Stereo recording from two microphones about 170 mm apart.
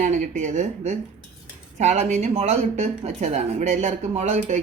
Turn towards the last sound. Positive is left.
turn(degrees=-45)  # may be behind; listen again after turning